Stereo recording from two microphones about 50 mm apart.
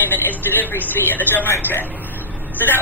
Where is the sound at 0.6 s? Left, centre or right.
Left.